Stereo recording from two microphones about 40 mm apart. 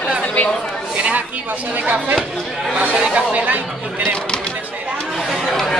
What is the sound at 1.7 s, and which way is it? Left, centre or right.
Speech, right.